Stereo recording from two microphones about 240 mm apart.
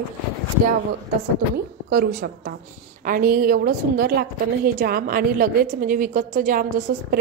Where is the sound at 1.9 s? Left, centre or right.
Right.